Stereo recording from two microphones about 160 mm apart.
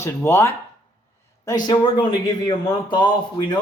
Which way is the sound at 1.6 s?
30° left (ahead or behind).